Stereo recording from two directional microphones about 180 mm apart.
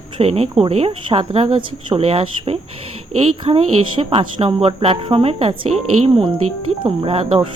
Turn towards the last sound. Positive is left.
turn(degrees=-30)  # may be behind; listen again after turning